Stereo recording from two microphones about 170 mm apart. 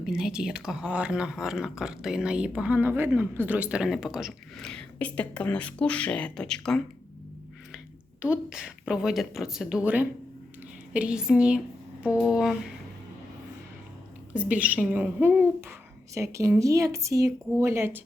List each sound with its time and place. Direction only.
0.0 s speech: 5° right (ahead or behind)
8.2 s speech: 5° right (ahead or behind)
14.3 s speech: 10° right (ahead or behind)